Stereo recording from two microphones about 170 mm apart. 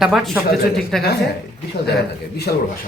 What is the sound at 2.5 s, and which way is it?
Speech, 60° left (ahead or behind).